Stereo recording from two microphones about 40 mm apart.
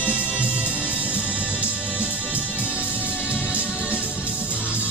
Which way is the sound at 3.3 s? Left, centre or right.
Right.